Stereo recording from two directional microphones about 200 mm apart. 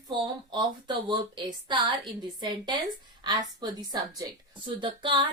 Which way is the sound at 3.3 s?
20° right (ahead or behind).